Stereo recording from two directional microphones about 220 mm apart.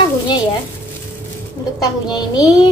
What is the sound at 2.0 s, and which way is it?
Speech, 20° left (ahead or behind).